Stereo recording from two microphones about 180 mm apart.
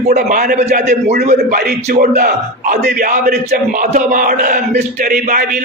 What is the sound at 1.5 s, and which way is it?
A man's voice, 60° right (ahead or behind).